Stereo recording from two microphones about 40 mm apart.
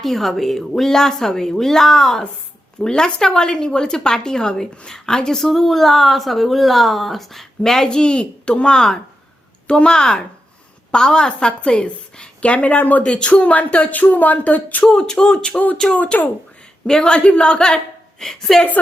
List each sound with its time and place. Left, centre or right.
0.0 s a woman's voice: centre
7.9 s a woman's voice: left
13.0 s a woman's voice: left
13.3 s speech: left
13.9 s speech: left
14.9 s a woman's voice: centre
15.5 s speech: left
16.8 s a woman's voice: centre
18.2 s speech: centre